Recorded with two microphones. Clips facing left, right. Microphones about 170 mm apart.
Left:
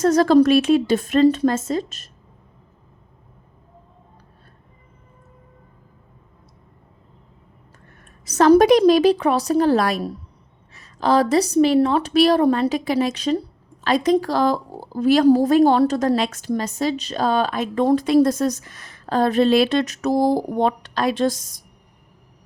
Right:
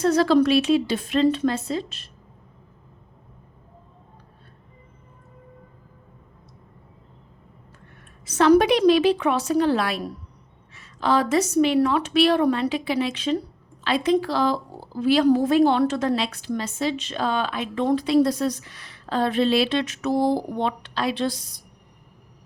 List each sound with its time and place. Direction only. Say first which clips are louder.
0.0 s a woman's voice: left 4 dB; 45° left (ahead or behind)
8.2 s a woman's voice: left 3 dB; 40° left (ahead or behind)